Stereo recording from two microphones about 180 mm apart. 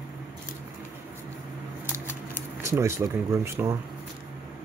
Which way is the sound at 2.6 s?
15° right (ahead or behind).